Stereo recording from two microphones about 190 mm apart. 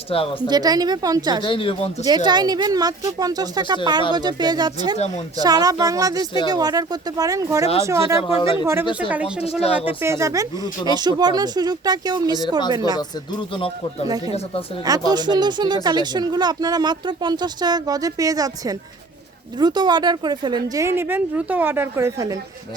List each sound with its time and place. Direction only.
0.1 s speech: 30° left (ahead or behind)
0.4 s speech: 20° right (ahead or behind)
1.5 s speech: 30° left (ahead or behind)
2.0 s speech: 20° right (ahead or behind)
4.9 s speech: 35° left (ahead or behind)
5.4 s a woman's voice: 20° right (ahead or behind)
8.2 s speech: 25° left (ahead or behind)
9.0 s speech: 5° right (ahead or behind)
9.4 s speech: 30° left (ahead or behind)
9.8 s a woman's voice: 15° right (ahead or behind)
13.0 s speech: 25° left (ahead or behind)
14.8 s a woman's voice: 20° right (ahead or behind)